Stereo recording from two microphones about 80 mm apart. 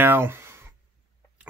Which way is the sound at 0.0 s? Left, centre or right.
Right.